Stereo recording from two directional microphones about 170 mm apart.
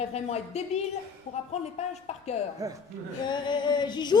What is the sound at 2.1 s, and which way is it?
Speech, 40° left (ahead or behind).